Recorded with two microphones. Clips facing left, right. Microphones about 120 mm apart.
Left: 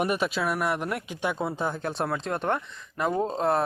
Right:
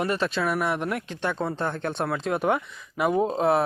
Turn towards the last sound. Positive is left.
turn(degrees=-5)  # may be behind; listen again after turning